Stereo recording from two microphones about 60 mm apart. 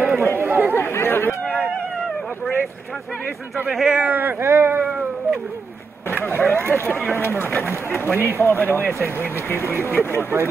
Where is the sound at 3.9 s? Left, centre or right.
Right.